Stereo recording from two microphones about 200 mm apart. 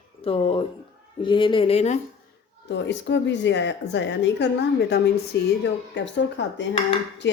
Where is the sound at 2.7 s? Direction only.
60° left (ahead or behind).